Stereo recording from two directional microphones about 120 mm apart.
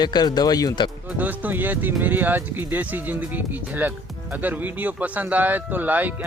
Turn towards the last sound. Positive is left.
turn(degrees=-15)  # may be behind; listen again after turning